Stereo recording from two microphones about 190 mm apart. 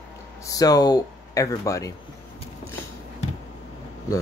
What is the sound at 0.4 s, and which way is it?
Speech, 20° left (ahead or behind).